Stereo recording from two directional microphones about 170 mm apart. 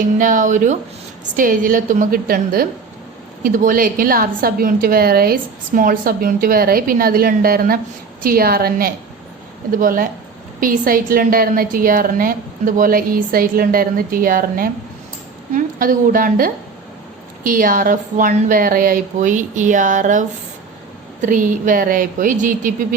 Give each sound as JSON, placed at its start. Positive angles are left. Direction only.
{"t": 0.2, "sound": "a woman's voice", "side_deg": -50}